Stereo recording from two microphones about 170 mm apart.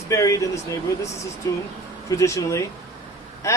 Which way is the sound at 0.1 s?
20° left (ahead or behind).